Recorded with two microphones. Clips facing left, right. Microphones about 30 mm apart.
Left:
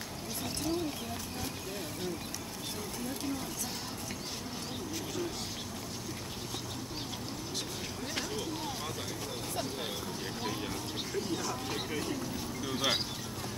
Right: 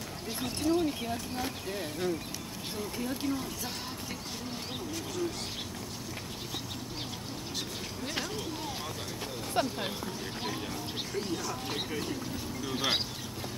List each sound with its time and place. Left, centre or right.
0.7 s speech: centre
1.3 s speech: centre
8.1 s a sound: centre
9.6 s speech: right
10.4 s speech: centre
11.9 s speech: centre